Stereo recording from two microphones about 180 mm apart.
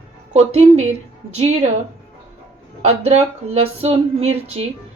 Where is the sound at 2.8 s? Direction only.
35° right (ahead or behind).